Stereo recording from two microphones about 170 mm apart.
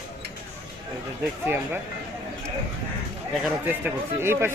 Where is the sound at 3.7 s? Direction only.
10° right (ahead or behind).